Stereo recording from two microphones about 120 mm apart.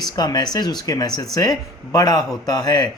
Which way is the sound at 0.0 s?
35° left (ahead or behind).